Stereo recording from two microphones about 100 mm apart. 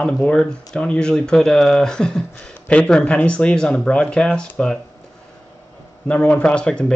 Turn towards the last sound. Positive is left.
turn(degrees=10)  # may be behind; listen again after turning